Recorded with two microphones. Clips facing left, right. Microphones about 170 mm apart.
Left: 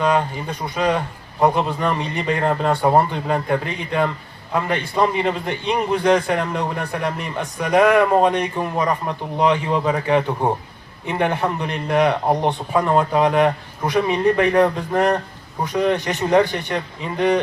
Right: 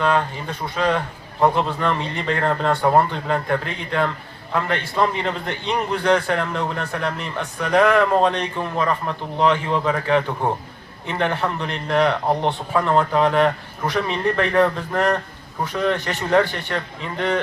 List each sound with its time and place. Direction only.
0.0 s a man's voice: 15° left (ahead or behind)